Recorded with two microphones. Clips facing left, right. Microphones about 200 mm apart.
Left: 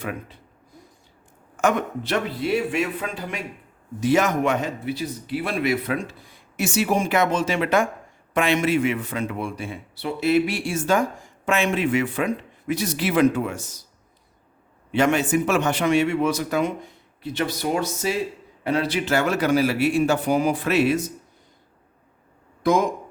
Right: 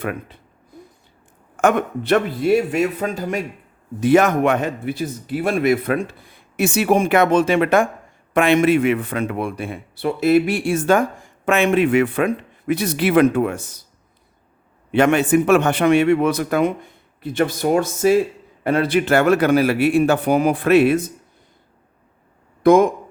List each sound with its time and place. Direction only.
0.0 s speech: 60° right (ahead or behind)
1.6 s a man's voice: 55° right (ahead or behind)
4.0 s speech: 55° right (ahead or behind)
14.9 s speech: 60° right (ahead or behind)
22.6 s speech: 55° right (ahead or behind)